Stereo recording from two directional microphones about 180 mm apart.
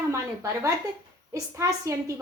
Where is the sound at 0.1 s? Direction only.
15° right (ahead or behind).